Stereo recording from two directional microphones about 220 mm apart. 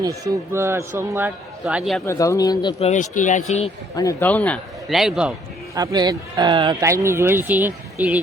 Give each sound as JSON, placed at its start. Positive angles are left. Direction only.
{"t": 0.0, "sound": "speech", "side_deg": -15}
{"t": 1.6, "sound": "a man's voice", "side_deg": 0}
{"t": 2.0, "sound": "speech", "side_deg": 15}
{"t": 2.9, "sound": "speech", "side_deg": 35}
{"t": 3.9, "sound": "a man's voice", "side_deg": 10}
{"t": 5.7, "sound": "speech", "side_deg": -15}